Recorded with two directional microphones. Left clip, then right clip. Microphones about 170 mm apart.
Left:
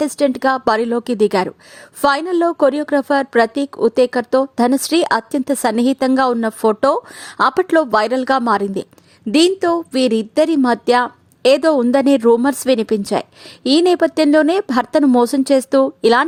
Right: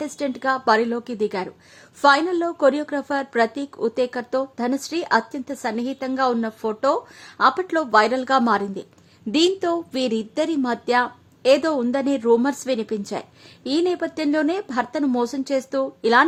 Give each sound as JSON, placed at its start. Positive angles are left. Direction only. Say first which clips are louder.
{"t": 0.0, "sound": "a woman's voice", "louder": "left 9 dB", "side_deg": 35}